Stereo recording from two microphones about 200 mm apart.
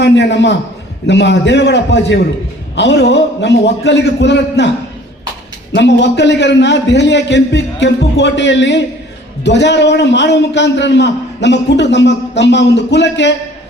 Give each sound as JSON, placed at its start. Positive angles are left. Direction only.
{"t": 0.0, "sound": "a man's voice", "side_deg": 60}
{"t": 5.7, "sound": "a man's voice", "side_deg": 60}